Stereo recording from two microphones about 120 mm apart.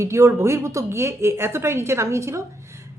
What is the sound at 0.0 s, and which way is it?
A woman's voice, 25° right (ahead or behind).